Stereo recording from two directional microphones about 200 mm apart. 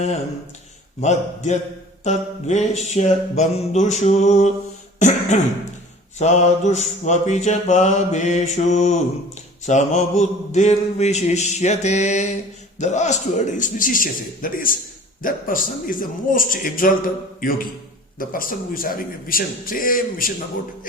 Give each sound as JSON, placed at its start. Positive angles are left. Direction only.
{"t": 1.0, "sound": "mantra", "side_deg": 35}
{"t": 4.9, "sound": "throat clearing", "side_deg": 35}
{"t": 6.1, "sound": "mantra", "side_deg": 35}
{"t": 15.2, "sound": "speech", "side_deg": 45}